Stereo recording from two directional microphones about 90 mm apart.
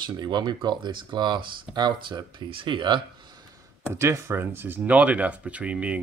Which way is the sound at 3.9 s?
30° right (ahead or behind).